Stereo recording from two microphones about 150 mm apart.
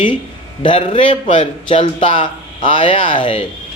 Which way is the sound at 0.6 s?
35° left (ahead or behind).